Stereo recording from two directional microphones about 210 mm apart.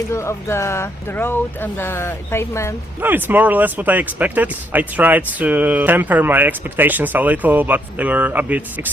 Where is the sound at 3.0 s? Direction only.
10° right (ahead or behind).